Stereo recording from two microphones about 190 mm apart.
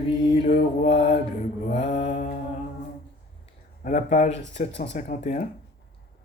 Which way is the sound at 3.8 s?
40° left (ahead or behind).